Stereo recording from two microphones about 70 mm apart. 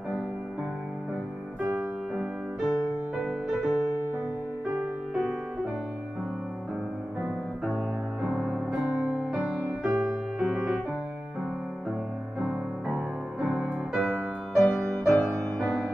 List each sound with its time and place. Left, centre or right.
1.8 s music: centre
8.2 s music: centre
9.8 s music: centre
12.4 s music: centre
14.0 s music: centre